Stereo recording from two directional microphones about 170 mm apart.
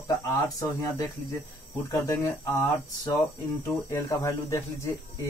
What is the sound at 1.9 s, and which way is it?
Speech, 20° left (ahead or behind).